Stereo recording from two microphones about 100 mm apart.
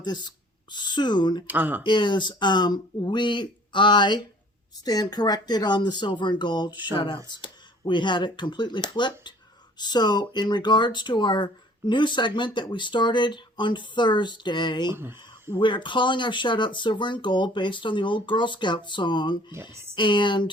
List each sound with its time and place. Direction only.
0.0 s speech: 50° left (ahead or behind)
1.5 s speech: 20° right (ahead or behind)
1.8 s speech: 50° left (ahead or behind)
14.9 s a sound: 25° right (ahead or behind)
15.5 s speech: 55° left (ahead or behind)
19.7 s speech: 25° right (ahead or behind)
20.0 s speech: 55° left (ahead or behind)